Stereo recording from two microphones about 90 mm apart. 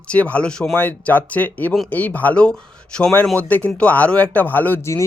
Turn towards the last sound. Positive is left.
turn(degrees=30)  # may be behind; listen again after turning